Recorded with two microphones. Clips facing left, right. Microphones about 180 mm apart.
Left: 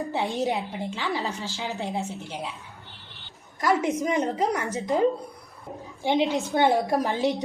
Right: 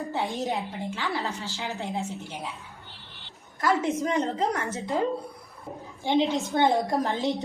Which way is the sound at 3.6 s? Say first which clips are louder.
Left 1 dB; 15° left (ahead or behind).